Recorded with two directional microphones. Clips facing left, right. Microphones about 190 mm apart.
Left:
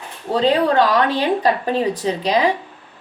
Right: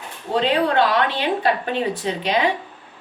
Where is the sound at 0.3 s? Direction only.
35° left (ahead or behind).